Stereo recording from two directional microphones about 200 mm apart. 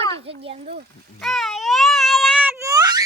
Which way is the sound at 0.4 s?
30° right (ahead or behind).